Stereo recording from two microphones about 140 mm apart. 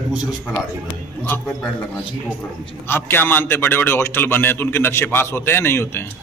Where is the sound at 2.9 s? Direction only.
15° left (ahead or behind).